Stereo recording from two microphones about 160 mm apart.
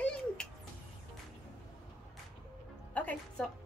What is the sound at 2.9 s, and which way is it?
Speech, 10° left (ahead or behind).